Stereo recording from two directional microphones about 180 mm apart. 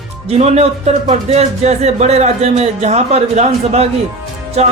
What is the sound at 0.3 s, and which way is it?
Speech, 35° right (ahead or behind).